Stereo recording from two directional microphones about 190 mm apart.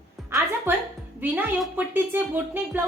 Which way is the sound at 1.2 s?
5° right (ahead or behind).